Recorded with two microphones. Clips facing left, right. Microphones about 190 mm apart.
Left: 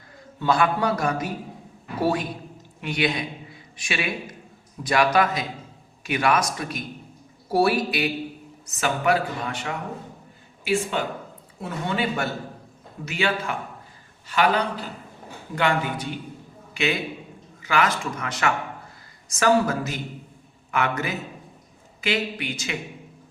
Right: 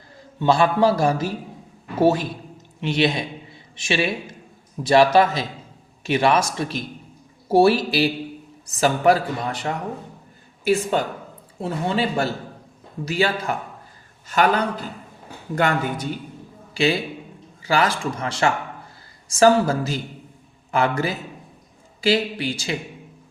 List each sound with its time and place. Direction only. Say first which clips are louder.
0.3 s a man's voice: right 4 dB; 25° right (ahead or behind); by 16.1 s 45° right (ahead or behind)
16.7 s a man's voice: right 5 dB; 30° right (ahead or behind)